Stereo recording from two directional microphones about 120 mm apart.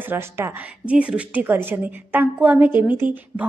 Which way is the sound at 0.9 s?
10° right (ahead or behind).